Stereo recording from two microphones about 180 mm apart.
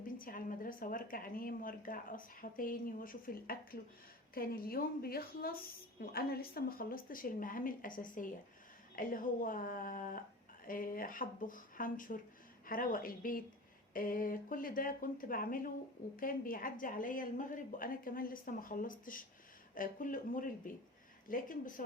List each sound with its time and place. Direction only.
0.2 s a woman's voice: 50° left (ahead or behind)